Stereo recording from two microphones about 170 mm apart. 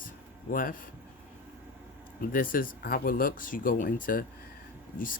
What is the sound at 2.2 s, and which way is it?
Speech, 55° left (ahead or behind).